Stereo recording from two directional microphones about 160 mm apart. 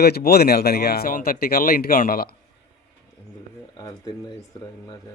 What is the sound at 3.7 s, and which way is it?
Speech, 25° left (ahead or behind).